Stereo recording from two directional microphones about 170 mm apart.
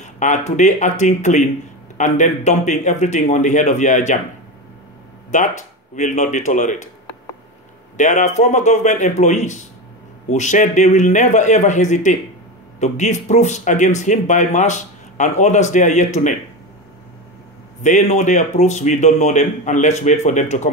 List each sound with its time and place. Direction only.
0.0 s speech: 45° left (ahead or behind)
5.3 s speech: 45° left (ahead or behind)
8.0 s speech: 45° left (ahead or behind)
17.8 s speech: 45° left (ahead or behind)